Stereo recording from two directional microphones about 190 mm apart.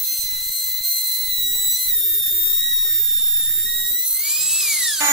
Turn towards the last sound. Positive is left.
turn(degrees=0)  # may be behind; listen again after turning